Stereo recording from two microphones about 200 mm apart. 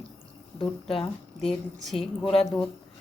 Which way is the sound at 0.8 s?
25° left (ahead or behind).